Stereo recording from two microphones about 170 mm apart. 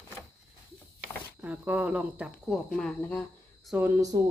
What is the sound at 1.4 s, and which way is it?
Speech, 10° right (ahead or behind).